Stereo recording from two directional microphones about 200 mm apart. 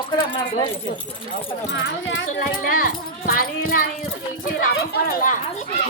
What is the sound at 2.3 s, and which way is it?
Speech, 45° left (ahead or behind).